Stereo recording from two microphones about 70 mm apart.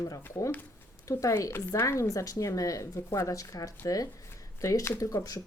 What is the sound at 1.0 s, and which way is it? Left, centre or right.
Speech, left.